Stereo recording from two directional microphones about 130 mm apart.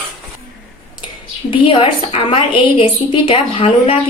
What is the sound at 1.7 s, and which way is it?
A woman's voice, 45° left (ahead or behind).